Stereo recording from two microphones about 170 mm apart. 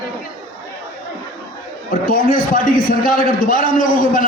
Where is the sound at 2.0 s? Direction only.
55° left (ahead or behind).